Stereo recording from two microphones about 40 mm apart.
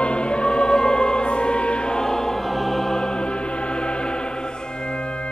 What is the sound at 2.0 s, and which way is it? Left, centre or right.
Choir, centre.